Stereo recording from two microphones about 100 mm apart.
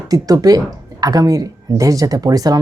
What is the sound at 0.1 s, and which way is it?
Speech, 35° right (ahead or behind).